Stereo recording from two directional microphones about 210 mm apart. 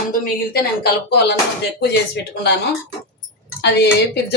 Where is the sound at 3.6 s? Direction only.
55° left (ahead or behind).